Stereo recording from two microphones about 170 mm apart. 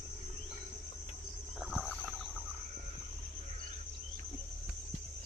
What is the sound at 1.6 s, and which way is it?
Wild animals, centre (ahead or behind).